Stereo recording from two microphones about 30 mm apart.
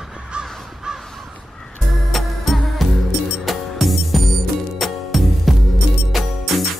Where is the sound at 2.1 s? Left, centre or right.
Centre.